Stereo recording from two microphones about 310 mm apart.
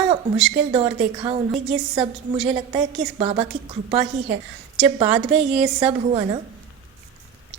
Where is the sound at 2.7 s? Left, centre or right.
Centre.